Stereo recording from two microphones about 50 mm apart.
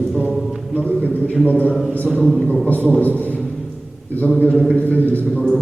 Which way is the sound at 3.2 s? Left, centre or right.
Left.